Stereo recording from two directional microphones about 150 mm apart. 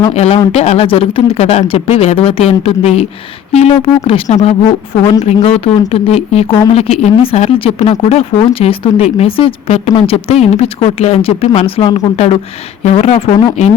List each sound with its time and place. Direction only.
0.1 s speech: 45° left (ahead or behind)